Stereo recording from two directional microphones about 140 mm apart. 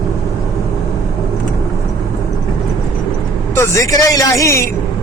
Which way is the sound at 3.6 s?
25° left (ahead or behind).